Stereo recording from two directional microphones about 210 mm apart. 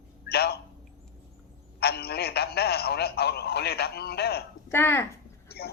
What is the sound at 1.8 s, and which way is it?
A man's voice, 50° left (ahead or behind).